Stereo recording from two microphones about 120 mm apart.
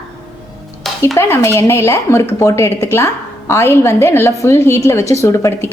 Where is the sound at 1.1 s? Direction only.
25° left (ahead or behind).